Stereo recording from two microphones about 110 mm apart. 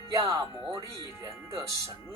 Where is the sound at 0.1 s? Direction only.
30° right (ahead or behind).